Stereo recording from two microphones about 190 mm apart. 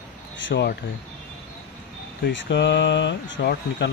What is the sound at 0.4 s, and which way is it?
Speech, 70° left (ahead or behind).